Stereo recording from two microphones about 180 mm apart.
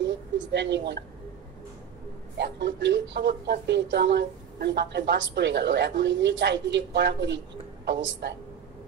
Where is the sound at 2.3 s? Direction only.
75° right (ahead or behind).